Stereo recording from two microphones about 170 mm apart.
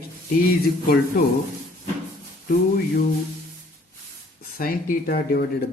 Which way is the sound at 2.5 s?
60° left (ahead or behind).